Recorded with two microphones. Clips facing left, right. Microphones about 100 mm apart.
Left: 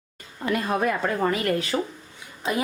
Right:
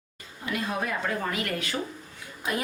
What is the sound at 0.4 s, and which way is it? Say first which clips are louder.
Speech: left 6 dB; 50° left (ahead or behind).